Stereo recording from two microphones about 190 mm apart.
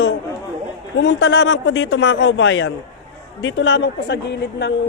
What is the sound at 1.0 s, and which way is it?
A man's voice, 65° left (ahead or behind).